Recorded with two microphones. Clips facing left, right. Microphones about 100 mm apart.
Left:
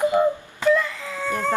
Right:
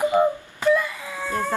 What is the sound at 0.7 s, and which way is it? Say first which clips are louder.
Whimper: left 1 dB; 15° right (ahead or behind).